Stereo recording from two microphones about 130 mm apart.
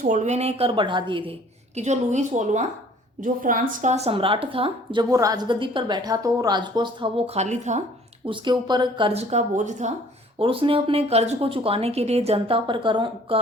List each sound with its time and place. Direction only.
0.0 s a woman's voice: 70° right (ahead or behind); by 1.4 s 40° right (ahead or behind)
1.7 s a woman's voice: 65° right (ahead or behind)
3.2 s a woman's voice: 90° right; by 5.0 s 40° right (ahead or behind)
5.1 s a woman's voice: 25° right (ahead or behind)
7.3 s a woman's voice: 65° right (ahead or behind)
8.3 s a woman's voice: 35° right (ahead or behind)
9.3 s a woman's voice: 65° right (ahead or behind)
10.3 s a woman's voice: 45° right (ahead or behind)